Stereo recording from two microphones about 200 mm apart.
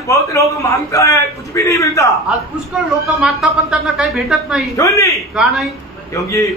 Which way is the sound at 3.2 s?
5° right (ahead or behind).